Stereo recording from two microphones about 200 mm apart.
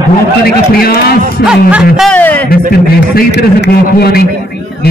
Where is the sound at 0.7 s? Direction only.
50° left (ahead or behind).